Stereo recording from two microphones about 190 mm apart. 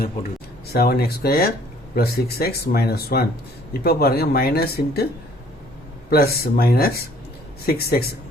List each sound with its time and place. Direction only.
0.7 s speech: 55° left (ahead or behind)
6.1 s speech: 55° left (ahead or behind)